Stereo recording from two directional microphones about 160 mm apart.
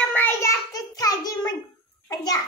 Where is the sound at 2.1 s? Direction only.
25° left (ahead or behind).